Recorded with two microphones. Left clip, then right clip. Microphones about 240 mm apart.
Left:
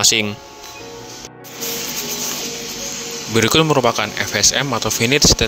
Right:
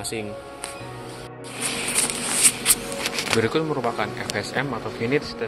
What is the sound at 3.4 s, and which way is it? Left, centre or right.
Speech, left.